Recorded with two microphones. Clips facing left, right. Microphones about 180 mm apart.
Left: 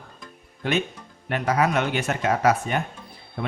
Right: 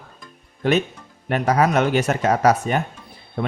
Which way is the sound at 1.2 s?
40° right (ahead or behind).